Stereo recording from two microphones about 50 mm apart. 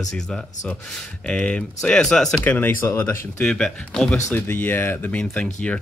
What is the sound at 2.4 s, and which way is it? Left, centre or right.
Speech, left.